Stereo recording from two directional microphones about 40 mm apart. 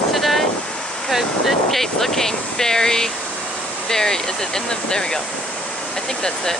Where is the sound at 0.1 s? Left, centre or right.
Centre.